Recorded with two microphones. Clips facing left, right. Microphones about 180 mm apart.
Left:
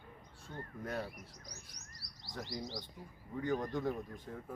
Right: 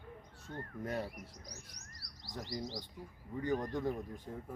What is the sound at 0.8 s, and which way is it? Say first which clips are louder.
Speech: right 2 dB; 20° right (ahead or behind).